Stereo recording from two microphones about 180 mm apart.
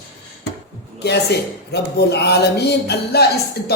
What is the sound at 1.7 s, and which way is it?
A man's voice, 65° left (ahead or behind).